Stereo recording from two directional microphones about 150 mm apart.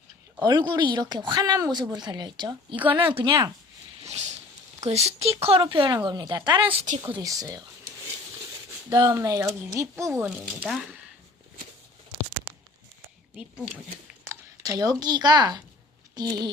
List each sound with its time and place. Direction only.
0.4 s speech: 30° right (ahead or behind)
4.1 s a sound: 50° right (ahead or behind)
4.9 s speech: 45° right (ahead or behind); by 7.6 s 25° right (ahead or behind)
8.9 s speech: 25° right (ahead or behind)
10.2 s speech: 5° right (ahead or behind)
13.3 s speech: 5° right (ahead or behind)
14.3 s speech: 20° right (ahead or behind)